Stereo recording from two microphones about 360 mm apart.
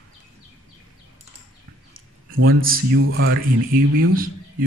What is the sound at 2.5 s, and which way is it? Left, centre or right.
Speech, right.